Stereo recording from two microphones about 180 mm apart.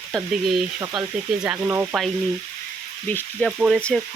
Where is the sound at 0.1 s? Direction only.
Centre (ahead or behind).